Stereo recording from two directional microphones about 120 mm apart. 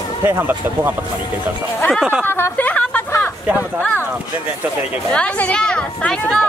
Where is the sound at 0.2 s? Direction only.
20° right (ahead or behind).